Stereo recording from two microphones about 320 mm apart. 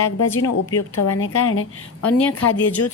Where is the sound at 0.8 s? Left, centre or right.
Left.